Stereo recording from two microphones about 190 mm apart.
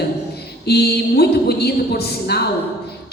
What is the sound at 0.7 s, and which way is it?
A woman's voice, 60° left (ahead or behind).